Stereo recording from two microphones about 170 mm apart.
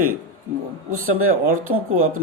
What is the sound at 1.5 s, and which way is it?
Speech, 55° right (ahead or behind).